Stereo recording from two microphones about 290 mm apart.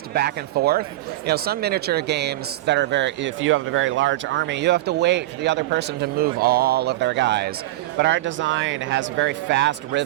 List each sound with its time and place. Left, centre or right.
0.1 s speech: right